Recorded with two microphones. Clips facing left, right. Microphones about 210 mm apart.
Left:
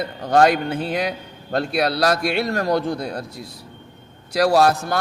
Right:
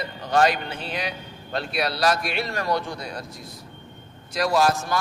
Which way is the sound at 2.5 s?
45° left (ahead or behind).